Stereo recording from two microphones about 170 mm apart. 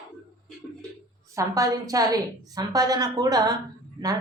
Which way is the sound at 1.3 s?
20° right (ahead or behind).